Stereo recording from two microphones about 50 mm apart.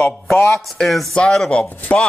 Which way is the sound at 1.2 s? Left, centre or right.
Centre.